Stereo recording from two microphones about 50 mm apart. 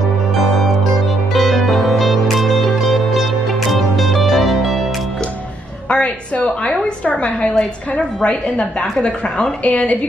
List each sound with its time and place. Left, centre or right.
1.3 s music: centre
5.9 s a sound: left
8.2 s a woman's voice: left